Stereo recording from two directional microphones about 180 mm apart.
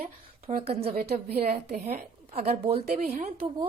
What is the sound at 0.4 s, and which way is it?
Speech, 35° right (ahead or behind).